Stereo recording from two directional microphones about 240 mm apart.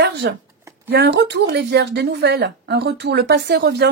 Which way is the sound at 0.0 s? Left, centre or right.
Right.